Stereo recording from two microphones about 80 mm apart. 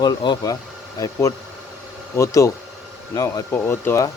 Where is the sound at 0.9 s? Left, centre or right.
Left.